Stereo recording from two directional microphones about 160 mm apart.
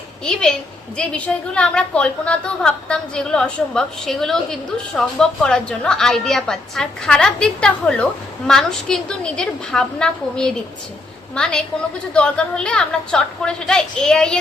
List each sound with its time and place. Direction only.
0.3 s a woman's voice: 5° left (ahead or behind)
12.1 s a woman's voice: 5° left (ahead or behind)